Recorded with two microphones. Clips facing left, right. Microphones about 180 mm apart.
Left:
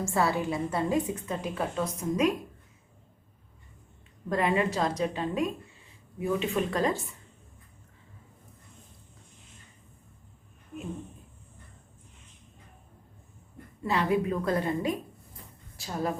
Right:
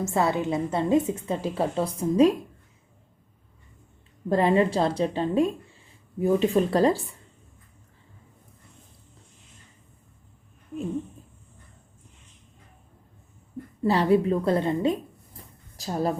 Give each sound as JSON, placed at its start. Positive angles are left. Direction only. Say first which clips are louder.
{"t": 0.0, "sound": "a woman's voice", "louder": "right 3 dB", "side_deg": -20}
{"t": 4.3, "sound": "a woman's voice", "louder": "right 6 dB", "side_deg": -30}
{"t": 13.8, "sound": "a woman's voice", "louder": "right 6 dB", "side_deg": -35}
{"t": 15.7, "sound": "a woman's voice", "louder": "right 5 dB", "side_deg": -35}